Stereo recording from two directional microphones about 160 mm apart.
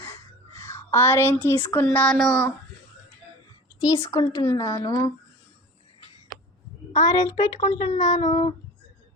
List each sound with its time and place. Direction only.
0.0 s speech: 15° left (ahead or behind)
3.8 s speech: 20° left (ahead or behind)
6.9 s speech: 25° left (ahead or behind)
7.6 s speech: 35° left (ahead or behind)